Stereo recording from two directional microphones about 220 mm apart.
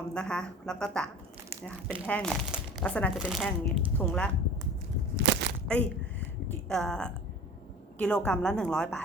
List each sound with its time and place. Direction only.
0.1 s speech: 5° left (ahead or behind)
5.1 s a sound: 50° right (ahead or behind)
5.6 s speech: 5° left (ahead or behind)